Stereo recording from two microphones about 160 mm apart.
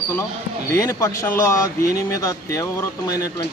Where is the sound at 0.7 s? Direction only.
20° left (ahead or behind).